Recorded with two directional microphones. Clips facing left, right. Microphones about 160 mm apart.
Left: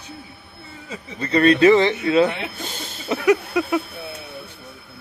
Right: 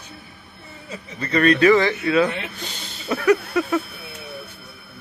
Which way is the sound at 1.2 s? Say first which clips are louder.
Left 2 dB; 30° left (ahead or behind).